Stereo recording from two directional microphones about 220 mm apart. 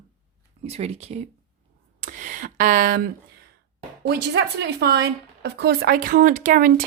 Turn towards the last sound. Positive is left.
turn(degrees=-40)  # may be behind; listen again after turning